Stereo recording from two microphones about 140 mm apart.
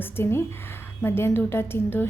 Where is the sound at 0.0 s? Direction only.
15° left (ahead or behind).